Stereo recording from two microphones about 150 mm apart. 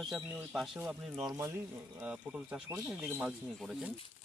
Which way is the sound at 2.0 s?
5° right (ahead or behind).